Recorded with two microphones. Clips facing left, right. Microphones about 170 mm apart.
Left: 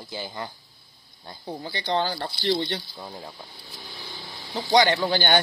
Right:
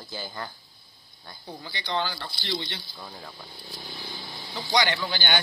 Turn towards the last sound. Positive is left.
turn(degrees=45)  # may be behind; listen again after turning